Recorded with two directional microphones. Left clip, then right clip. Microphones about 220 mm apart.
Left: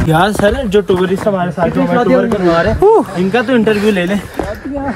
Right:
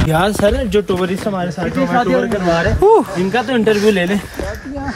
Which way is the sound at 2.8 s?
Centre (ahead or behind).